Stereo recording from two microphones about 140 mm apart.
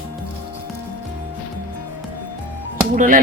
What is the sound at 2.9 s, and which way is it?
Speech, 70° right (ahead or behind).